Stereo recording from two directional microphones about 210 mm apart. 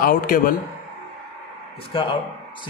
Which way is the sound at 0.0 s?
40° left (ahead or behind).